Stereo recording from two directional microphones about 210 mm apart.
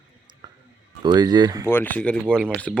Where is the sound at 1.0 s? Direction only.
20° right (ahead or behind).